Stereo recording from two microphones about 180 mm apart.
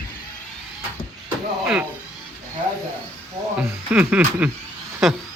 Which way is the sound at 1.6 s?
10° right (ahead or behind).